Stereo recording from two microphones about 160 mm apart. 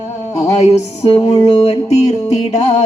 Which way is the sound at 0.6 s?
40° left (ahead or behind).